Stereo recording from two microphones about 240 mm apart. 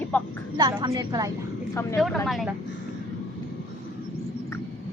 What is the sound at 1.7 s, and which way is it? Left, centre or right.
Speech, centre.